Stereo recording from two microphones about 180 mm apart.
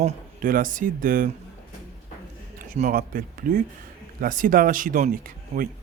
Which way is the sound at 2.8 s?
55° right (ahead or behind).